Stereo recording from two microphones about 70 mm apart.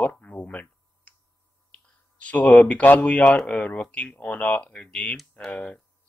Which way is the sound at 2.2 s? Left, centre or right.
Centre.